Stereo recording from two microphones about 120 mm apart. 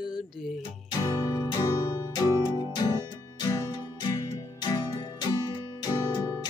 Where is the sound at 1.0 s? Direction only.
35° left (ahead or behind).